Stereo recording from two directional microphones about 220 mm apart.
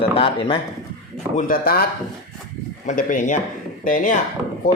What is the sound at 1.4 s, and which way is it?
Speech, 40° left (ahead or behind).